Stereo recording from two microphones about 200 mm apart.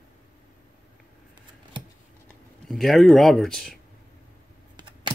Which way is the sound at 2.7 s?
Centre (ahead or behind).